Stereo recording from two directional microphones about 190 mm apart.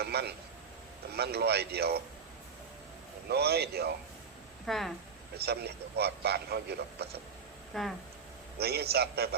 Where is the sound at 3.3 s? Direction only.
60° right (ahead or behind).